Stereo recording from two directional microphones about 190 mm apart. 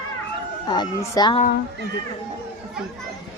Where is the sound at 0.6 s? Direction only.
20° left (ahead or behind).